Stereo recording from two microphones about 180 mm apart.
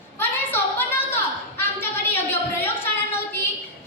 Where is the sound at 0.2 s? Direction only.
10° left (ahead or behind).